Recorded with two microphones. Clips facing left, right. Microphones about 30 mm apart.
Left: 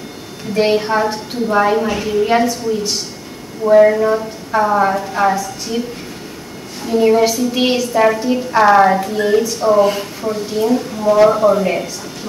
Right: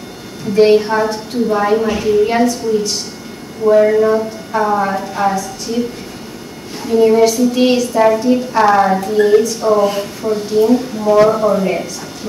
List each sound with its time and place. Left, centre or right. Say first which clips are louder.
0.6 s a woman's voice: right 4 dB; centre
3.6 s a woman's voice: even; centre
4.8 s a woman's voice: left 2 dB; centre
5.1 s a woman's voice: left 1 dB; centre
6.8 s a woman's voice: right 2 dB; centre